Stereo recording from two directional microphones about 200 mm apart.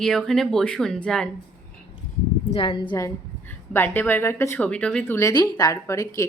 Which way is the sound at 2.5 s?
25° left (ahead or behind).